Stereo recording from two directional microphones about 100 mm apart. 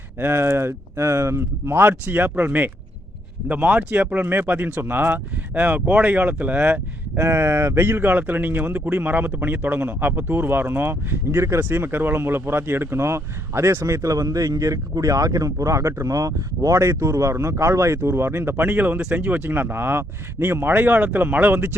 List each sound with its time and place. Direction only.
0.2 s speech: 25° right (ahead or behind)
7.2 s speech: 25° right (ahead or behind)